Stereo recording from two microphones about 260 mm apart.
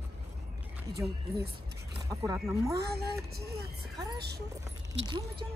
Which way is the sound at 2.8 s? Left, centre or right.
Right.